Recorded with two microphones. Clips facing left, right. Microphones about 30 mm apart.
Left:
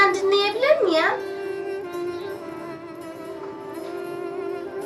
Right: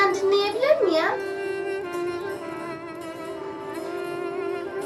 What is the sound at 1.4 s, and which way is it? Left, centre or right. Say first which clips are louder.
Music: right 1 dB; right.